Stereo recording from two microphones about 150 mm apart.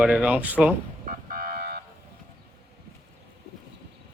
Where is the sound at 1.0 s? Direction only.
75° right (ahead or behind); by 1.8 s 90° right.